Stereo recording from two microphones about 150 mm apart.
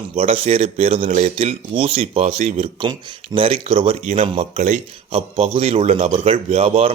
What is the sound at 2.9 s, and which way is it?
Speech, 25° right (ahead or behind).